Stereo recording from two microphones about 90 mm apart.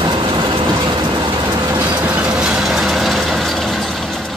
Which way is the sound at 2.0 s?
10° right (ahead or behind).